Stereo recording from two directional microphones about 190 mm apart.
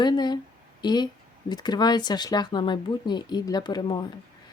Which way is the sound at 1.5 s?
20° left (ahead or behind).